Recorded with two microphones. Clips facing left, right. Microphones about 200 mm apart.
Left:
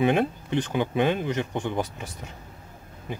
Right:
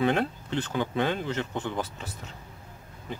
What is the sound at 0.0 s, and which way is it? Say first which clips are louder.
Speech: left 3 dB; 15° left (ahead or behind).